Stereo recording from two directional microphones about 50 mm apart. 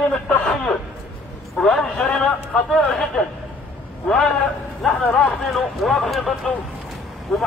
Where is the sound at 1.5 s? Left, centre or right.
Centre.